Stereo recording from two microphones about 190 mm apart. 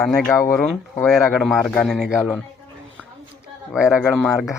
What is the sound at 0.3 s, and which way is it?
Speech, 15° left (ahead or behind).